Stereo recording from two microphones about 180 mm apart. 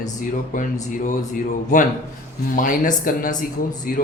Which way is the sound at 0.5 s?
45° left (ahead or behind).